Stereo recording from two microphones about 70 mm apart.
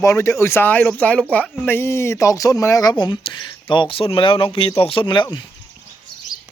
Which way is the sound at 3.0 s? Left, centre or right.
Left.